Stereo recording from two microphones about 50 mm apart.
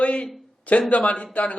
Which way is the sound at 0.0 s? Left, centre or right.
Left.